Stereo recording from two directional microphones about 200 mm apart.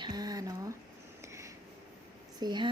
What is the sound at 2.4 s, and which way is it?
Speech, 20° right (ahead or behind).